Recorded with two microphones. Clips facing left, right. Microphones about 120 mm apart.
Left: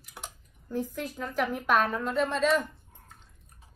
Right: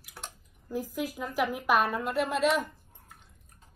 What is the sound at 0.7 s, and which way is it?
A woman's voice, 10° right (ahead or behind).